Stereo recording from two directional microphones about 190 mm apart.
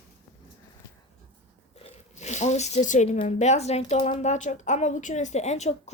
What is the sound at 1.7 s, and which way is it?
A woman's voice, 35° left (ahead or behind).